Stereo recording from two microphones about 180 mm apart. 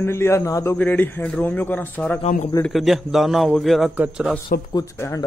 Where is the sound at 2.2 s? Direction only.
45° left (ahead or behind).